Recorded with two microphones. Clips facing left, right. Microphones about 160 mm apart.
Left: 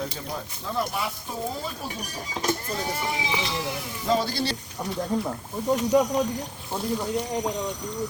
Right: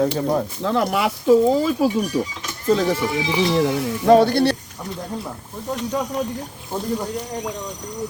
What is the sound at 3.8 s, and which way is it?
Speech, 65° right (ahead or behind).